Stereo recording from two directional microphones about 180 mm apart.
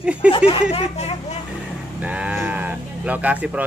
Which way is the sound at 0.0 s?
5° right (ahead or behind).